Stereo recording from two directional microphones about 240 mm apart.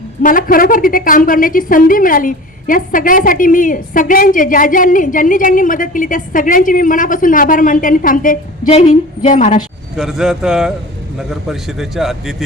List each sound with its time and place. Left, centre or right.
0.2 s a woman's voice: left
10.0 s a man's voice: centre